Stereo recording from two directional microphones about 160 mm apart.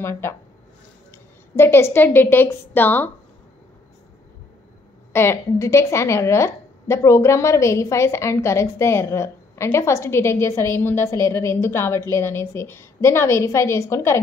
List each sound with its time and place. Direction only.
0.0 s a woman's voice: 15° left (ahead or behind)
1.5 s a woman's voice: 15° left (ahead or behind)
5.1 s a woman's voice: 15° left (ahead or behind)